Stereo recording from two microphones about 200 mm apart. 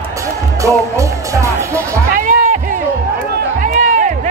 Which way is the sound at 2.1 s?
40° right (ahead or behind).